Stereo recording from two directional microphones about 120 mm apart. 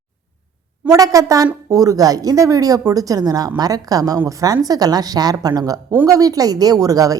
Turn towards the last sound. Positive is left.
turn(degrees=-30)  # may be behind; listen again after turning